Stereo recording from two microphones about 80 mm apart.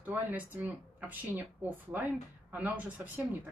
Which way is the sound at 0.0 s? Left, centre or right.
Right.